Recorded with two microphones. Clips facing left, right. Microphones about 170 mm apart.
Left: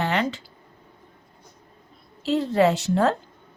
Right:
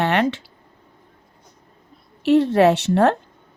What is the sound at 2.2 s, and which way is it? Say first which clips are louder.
Speech: right 6 dB; 70° right (ahead or behind).